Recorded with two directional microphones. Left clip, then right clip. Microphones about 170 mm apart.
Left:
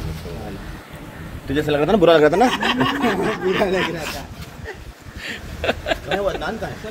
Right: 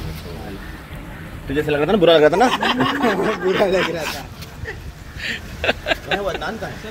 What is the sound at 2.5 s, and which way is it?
Speech, 90° left.